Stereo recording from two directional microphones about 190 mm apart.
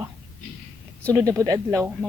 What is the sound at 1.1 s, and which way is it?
Speech, 15° right (ahead or behind).